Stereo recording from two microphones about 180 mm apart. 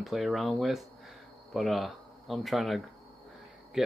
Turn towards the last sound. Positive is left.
turn(degrees=-5)  # may be behind; listen again after turning